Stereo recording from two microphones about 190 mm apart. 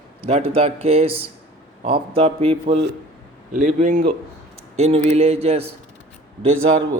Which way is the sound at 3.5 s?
40° right (ahead or behind).